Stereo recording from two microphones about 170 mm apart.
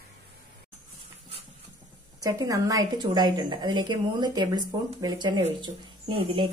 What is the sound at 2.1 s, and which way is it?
A woman's voice, 20° right (ahead or behind).